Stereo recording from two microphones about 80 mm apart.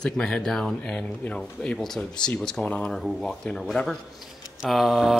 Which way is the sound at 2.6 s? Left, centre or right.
Centre.